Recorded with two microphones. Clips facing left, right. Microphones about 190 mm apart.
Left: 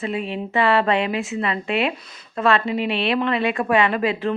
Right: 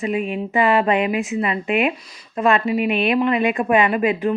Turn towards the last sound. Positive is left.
turn(degrees=-15)  # may be behind; listen again after turning